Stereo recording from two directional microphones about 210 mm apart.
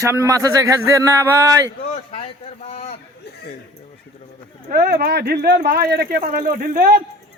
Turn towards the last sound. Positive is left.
turn(degrees=-45)  # may be behind; listen again after turning